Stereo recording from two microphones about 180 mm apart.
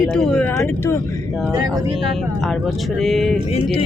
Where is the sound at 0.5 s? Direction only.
15° left (ahead or behind).